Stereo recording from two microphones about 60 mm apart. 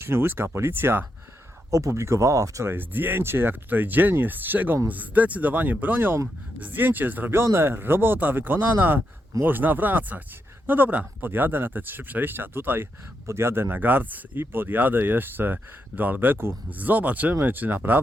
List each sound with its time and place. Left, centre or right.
0.0 s speech: right
1.7 s speech: right
2.6 s speech: right
7.3 s speech: right
16.6 s speech: right